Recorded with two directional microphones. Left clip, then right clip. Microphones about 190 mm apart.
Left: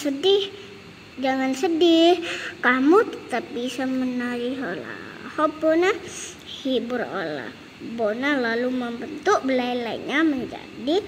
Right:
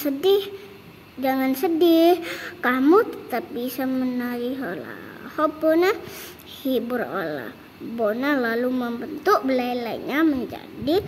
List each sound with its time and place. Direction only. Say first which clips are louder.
0.0 s a woman's voice: even; 15° right (ahead or behind)